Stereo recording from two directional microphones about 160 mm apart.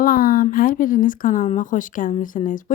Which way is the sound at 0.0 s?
65° left (ahead or behind).